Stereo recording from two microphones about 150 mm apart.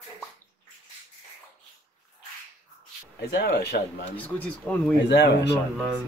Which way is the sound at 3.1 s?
90° left.